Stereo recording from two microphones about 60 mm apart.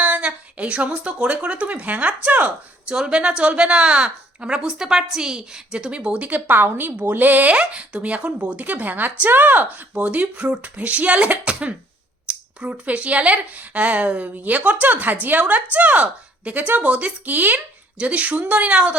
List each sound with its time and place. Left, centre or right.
0.0 s a woman's voice: right
2.9 s a woman's voice: centre